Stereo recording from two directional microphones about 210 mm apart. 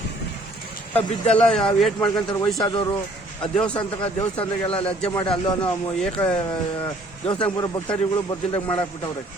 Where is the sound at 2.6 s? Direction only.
20° left (ahead or behind).